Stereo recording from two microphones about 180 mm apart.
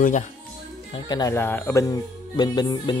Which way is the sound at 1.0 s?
20° left (ahead or behind).